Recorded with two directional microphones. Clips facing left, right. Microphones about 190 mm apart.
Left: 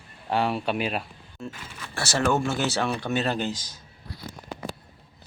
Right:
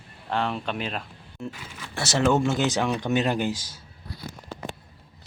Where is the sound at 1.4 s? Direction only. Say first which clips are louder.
Right 2 dB; 15° right (ahead or behind).